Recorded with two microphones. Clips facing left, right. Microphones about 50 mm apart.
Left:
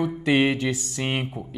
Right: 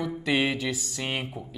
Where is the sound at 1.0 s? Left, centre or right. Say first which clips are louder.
Left 4 dB; left.